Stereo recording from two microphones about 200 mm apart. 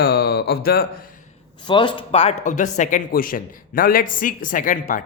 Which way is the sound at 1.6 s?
25° left (ahead or behind).